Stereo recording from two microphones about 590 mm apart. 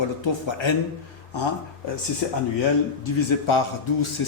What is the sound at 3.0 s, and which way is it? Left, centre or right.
A man's voice, left.